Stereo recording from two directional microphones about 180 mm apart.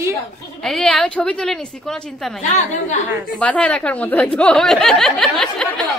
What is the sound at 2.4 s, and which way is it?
Speech, 40° left (ahead or behind).